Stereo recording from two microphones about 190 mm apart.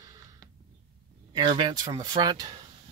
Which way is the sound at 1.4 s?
25° right (ahead or behind).